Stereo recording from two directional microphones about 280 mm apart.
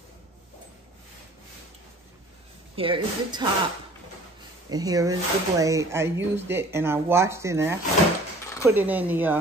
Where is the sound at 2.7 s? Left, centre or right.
Centre.